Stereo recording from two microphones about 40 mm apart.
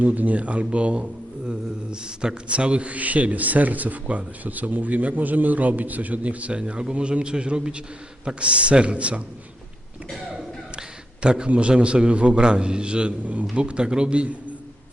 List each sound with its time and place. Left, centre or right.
0.0 s a man's voice: right
6.6 s a man's voice: right
10.8 s a man's voice: right